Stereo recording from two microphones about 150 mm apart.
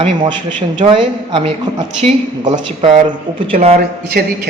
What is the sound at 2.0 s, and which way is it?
Speech, 55° right (ahead or behind).